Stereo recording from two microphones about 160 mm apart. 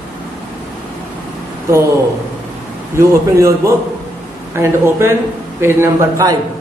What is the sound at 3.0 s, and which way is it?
A man's voice, 20° right (ahead or behind).